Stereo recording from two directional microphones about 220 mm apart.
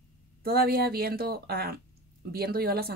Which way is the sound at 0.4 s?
45° right (ahead or behind).